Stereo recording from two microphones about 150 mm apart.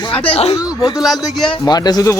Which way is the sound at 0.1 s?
10° left (ahead or behind).